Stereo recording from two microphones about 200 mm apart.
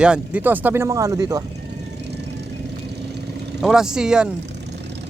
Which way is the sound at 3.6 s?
Centre (ahead or behind).